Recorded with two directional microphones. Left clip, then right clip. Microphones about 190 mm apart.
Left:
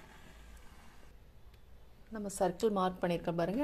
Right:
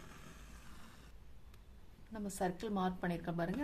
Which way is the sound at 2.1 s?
20° left (ahead or behind).